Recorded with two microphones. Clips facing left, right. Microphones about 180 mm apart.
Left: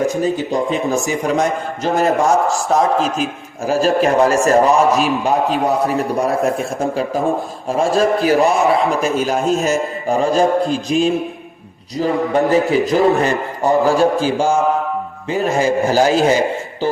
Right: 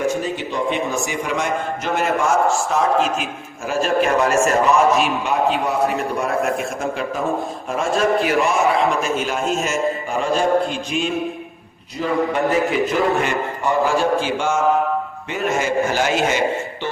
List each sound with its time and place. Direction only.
0.3 s a man's voice: 40° left (ahead or behind)